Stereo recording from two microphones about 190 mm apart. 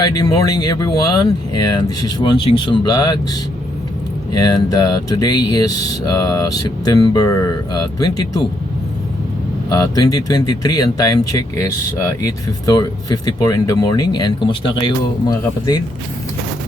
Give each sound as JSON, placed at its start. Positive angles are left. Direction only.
{"t": 0.0, "sound": "speech", "side_deg": 20}
{"t": 4.4, "sound": "speech", "side_deg": 20}
{"t": 9.6, "sound": "speech", "side_deg": 20}